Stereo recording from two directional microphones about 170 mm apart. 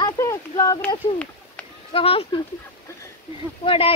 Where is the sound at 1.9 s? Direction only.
35° left (ahead or behind).